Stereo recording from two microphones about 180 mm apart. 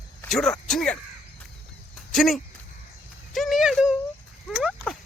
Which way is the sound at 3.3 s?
Centre (ahead or behind).